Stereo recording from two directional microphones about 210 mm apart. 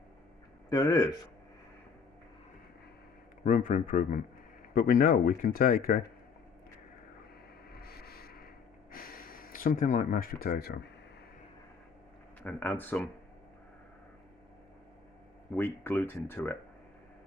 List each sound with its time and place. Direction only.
0.7 s speech: 15° left (ahead or behind)
3.4 s speech: 40° left (ahead or behind)
7.7 s a sound: 45° left (ahead or behind)
12.4 s speech: 5° left (ahead or behind)
15.5 s speech: 10° left (ahead or behind)